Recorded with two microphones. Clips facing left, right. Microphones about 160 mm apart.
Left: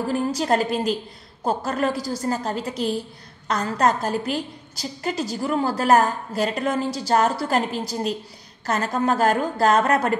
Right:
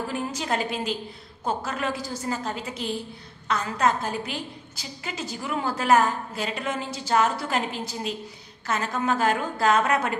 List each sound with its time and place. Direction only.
0.1 s a woman's voice: 40° left (ahead or behind)